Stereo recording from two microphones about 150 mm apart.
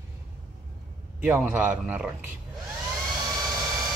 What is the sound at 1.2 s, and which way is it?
Speech, 10° right (ahead or behind).